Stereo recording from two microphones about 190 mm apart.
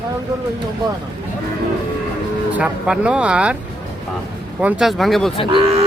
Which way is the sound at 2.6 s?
5° right (ahead or behind).